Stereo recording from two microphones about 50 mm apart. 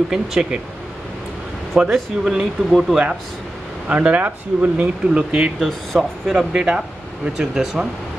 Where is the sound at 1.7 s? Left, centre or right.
Centre.